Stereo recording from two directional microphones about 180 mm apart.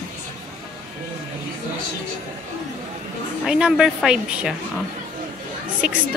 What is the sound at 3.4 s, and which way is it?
A woman's voice, 5° right (ahead or behind).